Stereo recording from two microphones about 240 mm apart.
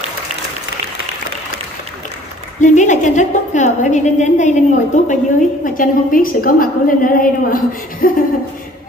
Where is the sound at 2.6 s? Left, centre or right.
Left.